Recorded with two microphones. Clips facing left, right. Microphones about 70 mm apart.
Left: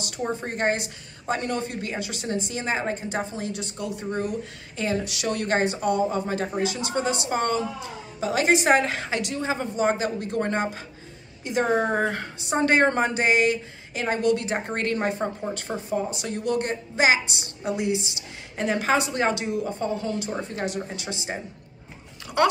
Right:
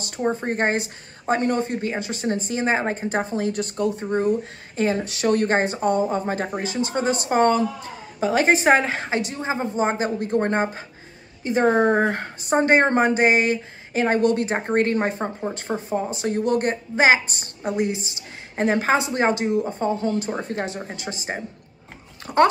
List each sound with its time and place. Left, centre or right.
0.0 s a woman's voice: right
4.0 s a woman's voice: right